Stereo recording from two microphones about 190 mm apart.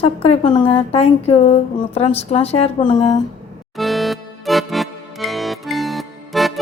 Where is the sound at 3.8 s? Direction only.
Centre (ahead or behind).